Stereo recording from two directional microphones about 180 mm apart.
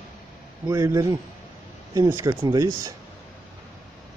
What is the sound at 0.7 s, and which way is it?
Speech, 20° right (ahead or behind).